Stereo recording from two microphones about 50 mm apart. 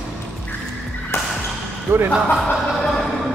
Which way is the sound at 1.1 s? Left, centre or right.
Left.